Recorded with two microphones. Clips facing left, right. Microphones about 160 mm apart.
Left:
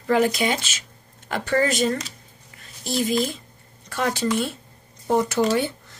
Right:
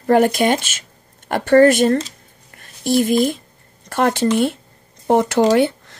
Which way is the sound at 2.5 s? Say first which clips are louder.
Right 10 dB; 55° right (ahead or behind).